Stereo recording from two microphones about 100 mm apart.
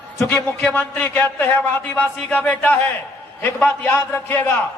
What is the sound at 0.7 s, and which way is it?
A man's voice, 15° left (ahead or behind).